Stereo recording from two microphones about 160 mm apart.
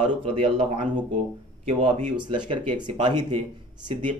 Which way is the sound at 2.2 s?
30° right (ahead or behind).